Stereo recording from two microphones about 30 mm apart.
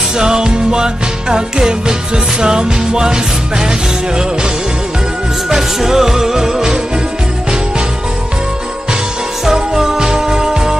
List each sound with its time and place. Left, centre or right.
0.2 s music: right
5.5 s music: centre
9.5 s music: centre